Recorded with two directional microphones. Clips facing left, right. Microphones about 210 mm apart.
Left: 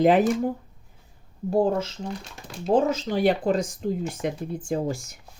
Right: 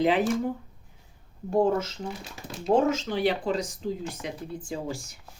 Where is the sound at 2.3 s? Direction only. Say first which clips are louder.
Even; 5° right (ahead or behind).